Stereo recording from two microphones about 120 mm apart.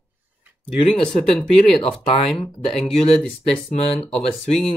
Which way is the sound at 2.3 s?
50° left (ahead or behind).